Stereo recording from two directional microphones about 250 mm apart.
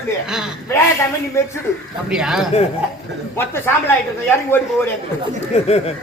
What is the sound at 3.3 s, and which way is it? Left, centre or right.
Speech, centre.